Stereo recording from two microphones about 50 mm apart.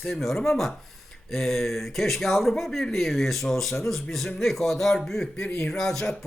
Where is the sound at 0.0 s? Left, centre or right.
Centre.